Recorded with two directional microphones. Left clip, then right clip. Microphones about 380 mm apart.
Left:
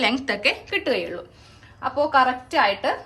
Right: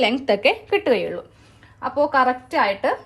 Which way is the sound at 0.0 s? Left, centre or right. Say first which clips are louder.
Right 3 dB; centre.